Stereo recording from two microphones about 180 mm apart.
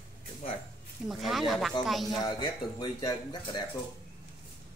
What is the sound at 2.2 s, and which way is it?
Speech, 25° left (ahead or behind).